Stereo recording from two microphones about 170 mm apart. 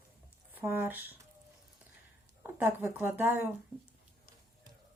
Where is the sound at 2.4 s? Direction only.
10° right (ahead or behind).